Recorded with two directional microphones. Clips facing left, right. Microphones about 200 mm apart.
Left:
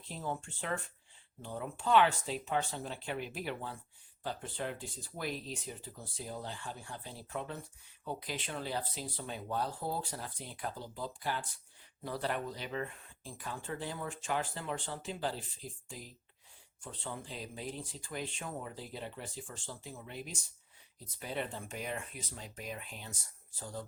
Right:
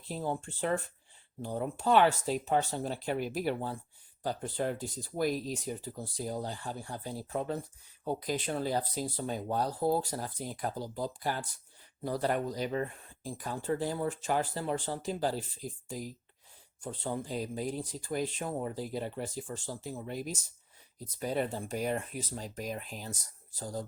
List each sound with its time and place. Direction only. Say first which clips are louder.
0.1 s speech: right 5 dB; 35° right (ahead or behind)